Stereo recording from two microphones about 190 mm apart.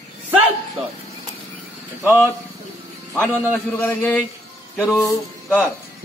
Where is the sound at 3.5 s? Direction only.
10° left (ahead or behind).